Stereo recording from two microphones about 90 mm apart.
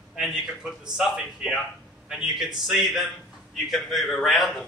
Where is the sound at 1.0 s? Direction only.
5° right (ahead or behind).